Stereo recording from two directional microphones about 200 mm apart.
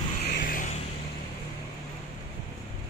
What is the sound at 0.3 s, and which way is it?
Vehicle, 45° left (ahead or behind).